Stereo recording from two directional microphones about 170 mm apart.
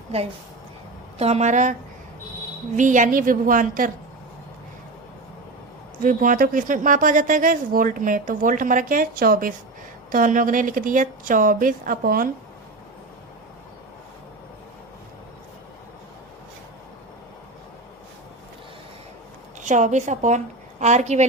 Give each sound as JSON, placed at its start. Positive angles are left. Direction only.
{"t": 1.2, "sound": "a woman's voice", "side_deg": -40}
{"t": 2.7, "sound": "a woman's voice", "side_deg": -50}
{"t": 6.0, "sound": "a woman's voice", "side_deg": -50}
{"t": 19.5, "sound": "a woman's voice", "side_deg": -45}